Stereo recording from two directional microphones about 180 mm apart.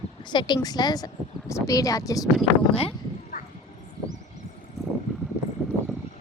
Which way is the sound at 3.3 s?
50° left (ahead or behind).